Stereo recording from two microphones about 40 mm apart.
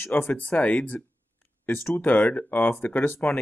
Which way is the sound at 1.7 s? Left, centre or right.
Left.